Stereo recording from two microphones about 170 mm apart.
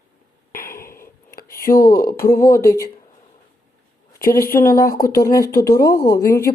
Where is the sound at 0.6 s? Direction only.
15° left (ahead or behind).